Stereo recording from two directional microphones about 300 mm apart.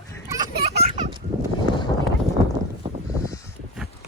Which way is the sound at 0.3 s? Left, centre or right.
Centre.